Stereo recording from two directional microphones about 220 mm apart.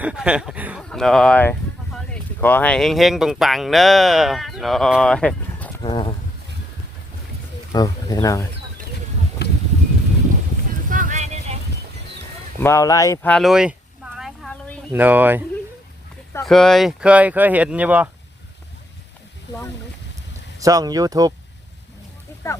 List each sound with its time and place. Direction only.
0.0 s speech: 5° right (ahead or behind)
5.8 s speech: 20° left (ahead or behind)
7.7 s speech: 15° left (ahead or behind)
9.4 s a sound: 45° left (ahead or behind)
10.8 s vehicle: 35° right (ahead or behind)
12.5 s speech: 10° left (ahead or behind)
14.2 s a sound: centre (ahead or behind)
14.9 s speech: 10° right (ahead or behind)
20.6 s speech: 15° right (ahead or behind)